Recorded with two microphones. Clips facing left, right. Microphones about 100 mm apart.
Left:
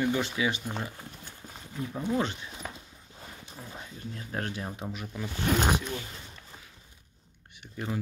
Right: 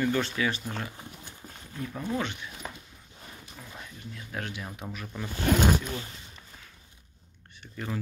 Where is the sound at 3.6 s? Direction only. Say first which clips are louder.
Left 3 dB; 25° left (ahead or behind).